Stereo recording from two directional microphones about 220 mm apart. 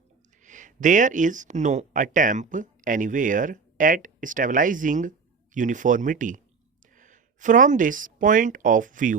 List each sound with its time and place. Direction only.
0.4 s speech: 35° right (ahead or behind)